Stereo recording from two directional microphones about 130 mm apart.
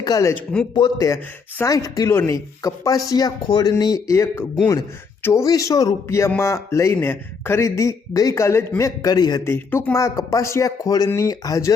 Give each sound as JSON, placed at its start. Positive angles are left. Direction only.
{"t": 0.0, "sound": "a man's voice", "side_deg": 25}
{"t": 9.4, "sound": "speech", "side_deg": 15}
{"t": 9.9, "sound": "a man's voice", "side_deg": 25}